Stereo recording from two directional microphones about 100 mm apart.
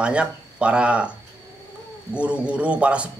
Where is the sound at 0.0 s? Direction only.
10° right (ahead or behind).